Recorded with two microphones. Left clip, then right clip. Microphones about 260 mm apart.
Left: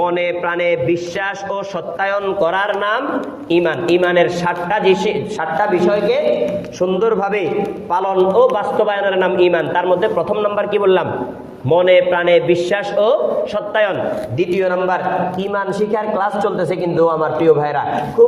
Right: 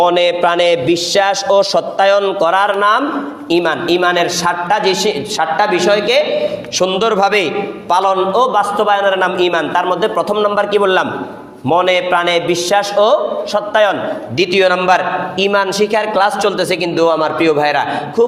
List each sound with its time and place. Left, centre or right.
0.0 s a man's voice: right
6.7 s a man's voice: right